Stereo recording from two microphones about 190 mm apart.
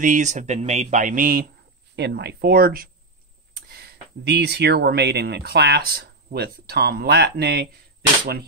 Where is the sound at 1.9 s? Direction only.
60° right (ahead or behind).